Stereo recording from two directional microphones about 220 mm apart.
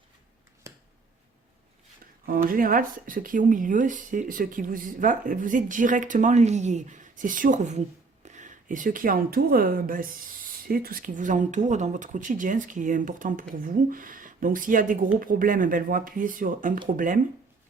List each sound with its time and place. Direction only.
0.7 s finger snapping: 15° right (ahead or behind)
2.2 s speech: 40° right (ahead or behind)